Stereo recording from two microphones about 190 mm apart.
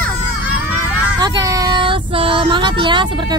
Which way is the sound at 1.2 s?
20° right (ahead or behind).